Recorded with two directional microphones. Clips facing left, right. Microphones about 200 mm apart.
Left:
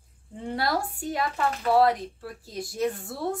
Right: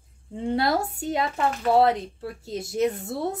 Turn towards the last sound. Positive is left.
turn(degrees=-20)  # may be behind; listen again after turning